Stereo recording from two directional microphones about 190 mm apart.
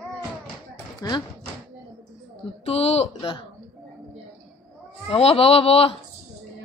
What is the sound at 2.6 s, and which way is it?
Speech, 35° left (ahead or behind).